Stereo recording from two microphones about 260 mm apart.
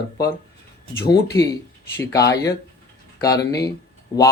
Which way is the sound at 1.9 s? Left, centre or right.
Centre.